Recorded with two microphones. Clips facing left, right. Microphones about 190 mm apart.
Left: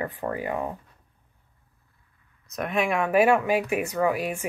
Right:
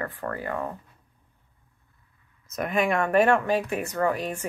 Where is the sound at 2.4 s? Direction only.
Centre (ahead or behind).